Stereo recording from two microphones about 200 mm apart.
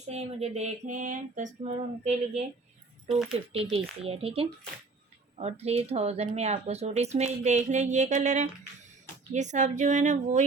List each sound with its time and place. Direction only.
0.1 s speech: 35° right (ahead or behind)
3.1 s speech: centre (ahead or behind)
3.3 s speech: 30° right (ahead or behind)